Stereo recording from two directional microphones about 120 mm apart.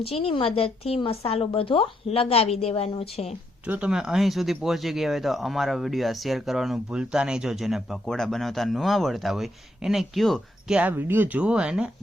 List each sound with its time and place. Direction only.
0.0 s speech: 55° left (ahead or behind)
3.7 s speech: 10° right (ahead or behind)
10.8 s speech: 15° right (ahead or behind)